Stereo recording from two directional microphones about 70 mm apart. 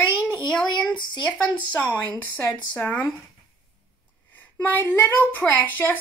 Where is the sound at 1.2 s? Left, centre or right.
Centre.